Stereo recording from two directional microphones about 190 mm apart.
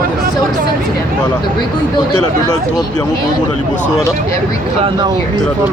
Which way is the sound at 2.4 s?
20° left (ahead or behind).